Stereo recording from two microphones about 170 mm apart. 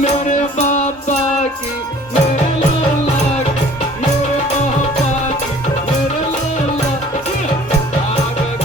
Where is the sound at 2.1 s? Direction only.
45° left (ahead or behind).